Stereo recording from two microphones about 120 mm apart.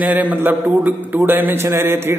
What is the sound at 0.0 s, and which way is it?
A man's voice, 15° right (ahead or behind).